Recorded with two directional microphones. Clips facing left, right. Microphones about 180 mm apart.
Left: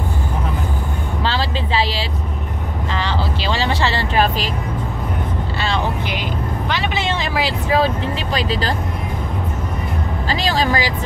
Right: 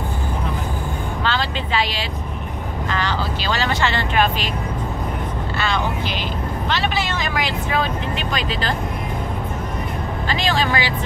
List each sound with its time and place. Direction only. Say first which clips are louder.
1.2 s vehicle: left 2 dB; 30° left (ahead or behind)
6.7 s speech: right 1 dB; 15° left (ahead or behind)
7.1 s speech: left 3 dB; 30° left (ahead or behind)
10.2 s speech: left 2 dB; 35° left (ahead or behind)